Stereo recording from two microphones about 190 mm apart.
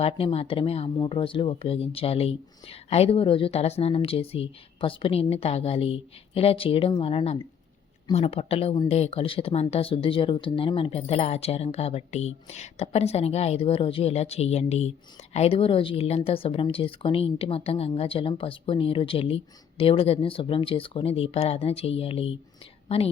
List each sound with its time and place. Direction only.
0.0 s speech: 30° left (ahead or behind)